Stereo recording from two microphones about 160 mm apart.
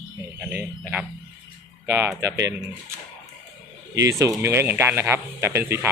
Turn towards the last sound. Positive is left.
turn(degrees=-15)  # may be behind; listen again after turning